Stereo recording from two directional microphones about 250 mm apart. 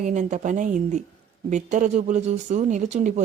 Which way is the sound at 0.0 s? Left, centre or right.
Right.